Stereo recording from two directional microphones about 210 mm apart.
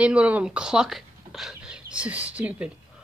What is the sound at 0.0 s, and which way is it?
Speech, 5° right (ahead or behind).